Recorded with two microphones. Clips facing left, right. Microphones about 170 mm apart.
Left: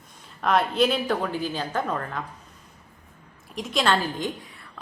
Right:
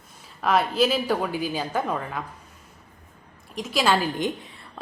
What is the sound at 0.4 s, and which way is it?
A woman's voice, 5° right (ahead or behind).